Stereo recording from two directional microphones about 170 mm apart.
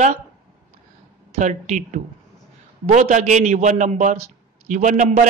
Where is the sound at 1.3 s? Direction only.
45° right (ahead or behind).